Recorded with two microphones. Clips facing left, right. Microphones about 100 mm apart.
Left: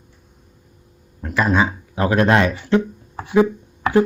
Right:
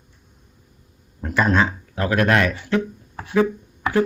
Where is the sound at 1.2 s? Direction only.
Centre (ahead or behind).